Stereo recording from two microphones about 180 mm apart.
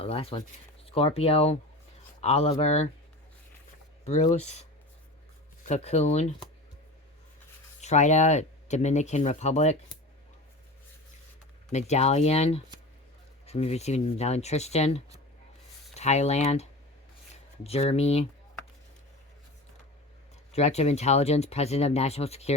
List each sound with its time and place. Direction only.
0.0 s speech: 35° left (ahead or behind)
4.0 s speech: 40° left (ahead or behind)
5.6 s speech: 40° left (ahead or behind)
7.8 s speech: 40° left (ahead or behind)
11.7 s speech: 40° left (ahead or behind)
20.5 s speech: 35° left (ahead or behind)